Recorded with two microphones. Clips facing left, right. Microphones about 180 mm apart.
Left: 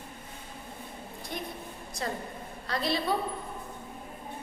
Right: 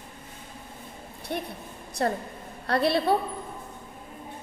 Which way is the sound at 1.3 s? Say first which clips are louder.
Right 6 dB; 55° right (ahead or behind).